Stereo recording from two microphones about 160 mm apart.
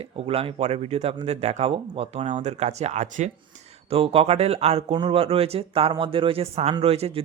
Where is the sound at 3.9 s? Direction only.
35° right (ahead or behind).